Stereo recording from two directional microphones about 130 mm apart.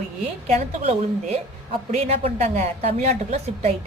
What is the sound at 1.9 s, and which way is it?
A woman's voice, 55° right (ahead or behind).